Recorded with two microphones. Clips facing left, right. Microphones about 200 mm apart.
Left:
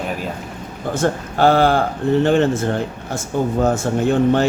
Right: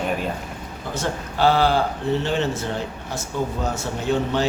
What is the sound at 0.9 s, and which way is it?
Speech, 50° left (ahead or behind).